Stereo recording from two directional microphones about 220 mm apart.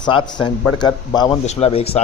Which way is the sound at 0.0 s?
20° left (ahead or behind).